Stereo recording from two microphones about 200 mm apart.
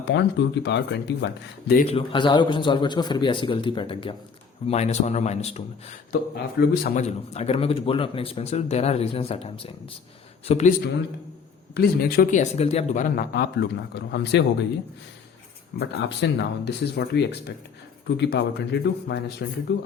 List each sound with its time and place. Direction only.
0.0 s speech: 60° left (ahead or behind)
1.8 s speech: 30° left (ahead or behind)
6.1 s speech: 50° left (ahead or behind)
6.9 s speech: 35° left (ahead or behind)
11.7 s speech: 50° left (ahead or behind)
13.6 s speech: 60° left (ahead or behind)
15.8 s speech: 60° left (ahead or behind)